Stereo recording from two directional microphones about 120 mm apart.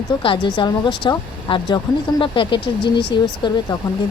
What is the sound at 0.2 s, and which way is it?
Speech, 40° left (ahead or behind).